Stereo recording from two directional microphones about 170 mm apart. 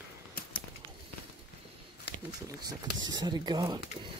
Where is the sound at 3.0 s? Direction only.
25° right (ahead or behind).